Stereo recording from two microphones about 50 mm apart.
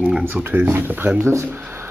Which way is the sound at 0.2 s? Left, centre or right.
Right.